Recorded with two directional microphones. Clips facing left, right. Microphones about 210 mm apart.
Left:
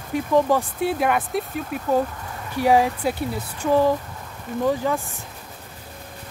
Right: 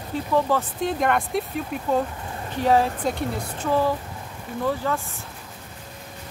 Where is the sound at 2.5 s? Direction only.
10° left (ahead or behind).